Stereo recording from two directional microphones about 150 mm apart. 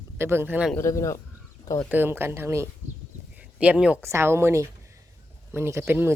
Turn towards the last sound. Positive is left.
turn(degrees=-15)  # may be behind; listen again after turning